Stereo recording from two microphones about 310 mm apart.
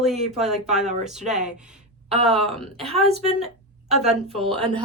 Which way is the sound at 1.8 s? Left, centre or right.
Centre.